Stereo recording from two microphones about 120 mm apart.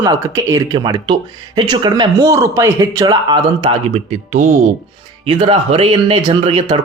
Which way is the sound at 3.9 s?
80° right.